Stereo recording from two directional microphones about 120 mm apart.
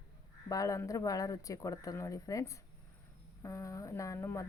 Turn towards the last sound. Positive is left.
turn(degrees=25)  # may be behind; listen again after turning